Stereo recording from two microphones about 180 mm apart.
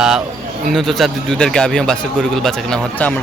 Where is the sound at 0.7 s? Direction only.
Centre (ahead or behind).